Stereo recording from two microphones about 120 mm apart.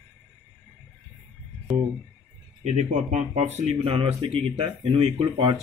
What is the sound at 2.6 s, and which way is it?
Speech, 80° right.